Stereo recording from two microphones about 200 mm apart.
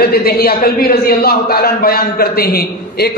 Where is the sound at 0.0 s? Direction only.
50° left (ahead or behind).